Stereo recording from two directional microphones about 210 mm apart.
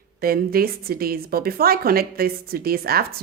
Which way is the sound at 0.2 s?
45° right (ahead or behind).